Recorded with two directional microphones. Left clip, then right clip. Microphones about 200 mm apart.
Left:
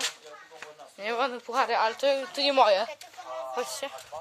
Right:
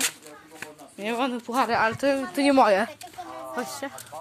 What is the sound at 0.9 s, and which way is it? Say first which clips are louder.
Speech: right 1 dB; 5° left (ahead or behind).